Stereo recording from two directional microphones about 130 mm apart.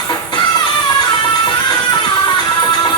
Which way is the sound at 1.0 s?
35° left (ahead or behind).